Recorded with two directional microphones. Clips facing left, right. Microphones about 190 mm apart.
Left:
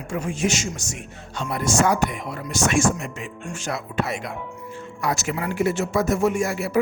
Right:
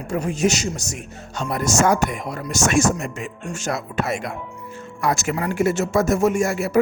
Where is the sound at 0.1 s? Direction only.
40° right (ahead or behind).